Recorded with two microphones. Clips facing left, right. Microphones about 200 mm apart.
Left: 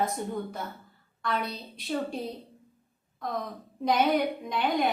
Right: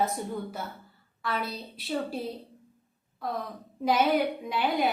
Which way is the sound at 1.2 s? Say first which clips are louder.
Left 1 dB; 5° right (ahead or behind).